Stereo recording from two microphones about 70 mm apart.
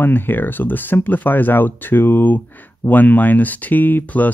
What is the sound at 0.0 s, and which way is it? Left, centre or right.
Speech, left.